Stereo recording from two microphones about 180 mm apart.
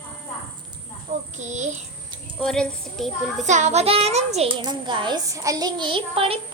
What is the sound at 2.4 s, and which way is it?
A child's voice, 5° left (ahead or behind).